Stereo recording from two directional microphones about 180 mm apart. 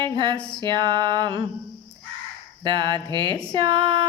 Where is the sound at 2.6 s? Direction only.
25° right (ahead or behind).